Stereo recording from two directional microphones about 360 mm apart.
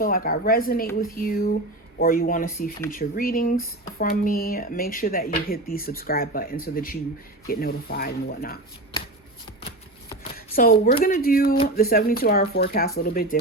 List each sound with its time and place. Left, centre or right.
0.0 s speech: left
10.3 s speech: left